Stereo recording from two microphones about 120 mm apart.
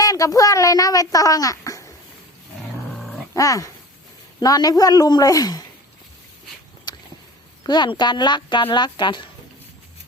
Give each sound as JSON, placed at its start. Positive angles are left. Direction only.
{"t": 0.0, "sound": "speech", "side_deg": 30}
{"t": 3.3, "sound": "speech", "side_deg": 30}
{"t": 6.9, "sound": "a sound", "side_deg": 35}
{"t": 7.6, "sound": "speech", "side_deg": 40}